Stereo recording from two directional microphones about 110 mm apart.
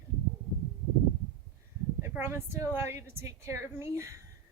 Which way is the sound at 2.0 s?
20° right (ahead or behind).